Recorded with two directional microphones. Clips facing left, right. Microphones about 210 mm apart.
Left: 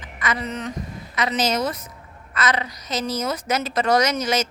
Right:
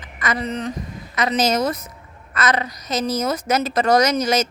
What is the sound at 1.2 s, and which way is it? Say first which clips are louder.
Speech: right 3 dB; 45° right (ahead or behind).